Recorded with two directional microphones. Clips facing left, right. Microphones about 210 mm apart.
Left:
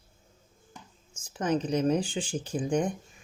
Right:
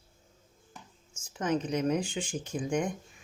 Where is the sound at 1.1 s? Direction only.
35° left (ahead or behind).